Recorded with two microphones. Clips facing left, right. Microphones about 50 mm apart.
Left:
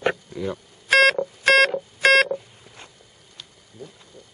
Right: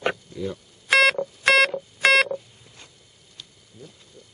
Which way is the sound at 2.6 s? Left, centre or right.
Left.